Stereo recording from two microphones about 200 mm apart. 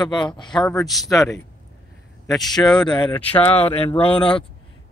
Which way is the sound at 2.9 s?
20° left (ahead or behind).